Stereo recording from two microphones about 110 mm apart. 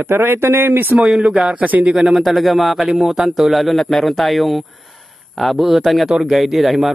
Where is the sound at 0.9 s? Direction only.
5° right (ahead or behind).